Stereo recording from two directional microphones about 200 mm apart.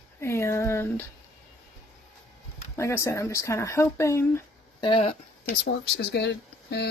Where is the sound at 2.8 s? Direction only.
15° left (ahead or behind).